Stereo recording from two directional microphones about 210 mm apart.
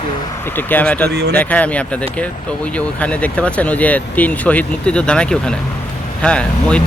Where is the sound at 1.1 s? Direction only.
50° right (ahead or behind).